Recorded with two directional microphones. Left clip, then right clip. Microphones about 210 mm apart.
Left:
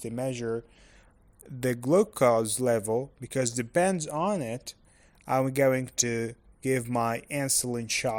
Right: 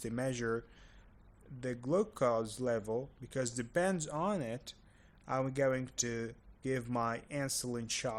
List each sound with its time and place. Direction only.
0.0 s speech: 15° left (ahead or behind)
1.6 s speech: 40° left (ahead or behind)